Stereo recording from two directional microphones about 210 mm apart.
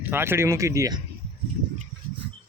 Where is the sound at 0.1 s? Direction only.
10° right (ahead or behind).